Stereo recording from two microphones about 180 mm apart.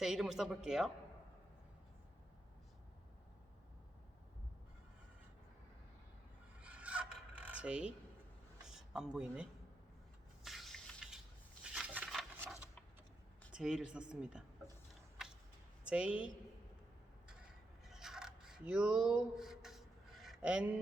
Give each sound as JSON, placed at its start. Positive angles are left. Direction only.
{"t": 0.0, "sound": "speech", "side_deg": 0}
{"t": 6.6, "sound": "filing", "side_deg": -5}
{"t": 8.6, "sound": "speech", "side_deg": -5}
{"t": 10.4, "sound": "spray", "side_deg": 0}
{"t": 11.6, "sound": "a sound", "side_deg": -5}
{"t": 13.5, "sound": "speech", "side_deg": 0}
{"t": 15.8, "sound": "a woman's voice", "side_deg": -5}
{"t": 17.8, "sound": "a sound", "side_deg": 0}